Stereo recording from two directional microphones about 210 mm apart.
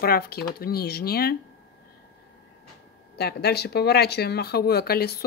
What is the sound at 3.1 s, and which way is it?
Speech, 50° left (ahead or behind).